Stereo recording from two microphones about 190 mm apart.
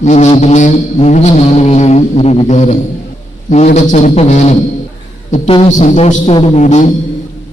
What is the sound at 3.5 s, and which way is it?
Vehicle, 40° left (ahead or behind).